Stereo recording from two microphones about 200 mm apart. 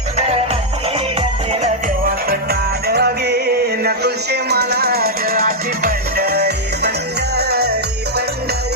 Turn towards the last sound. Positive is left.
turn(degrees=-55)  # may be behind; listen again after turning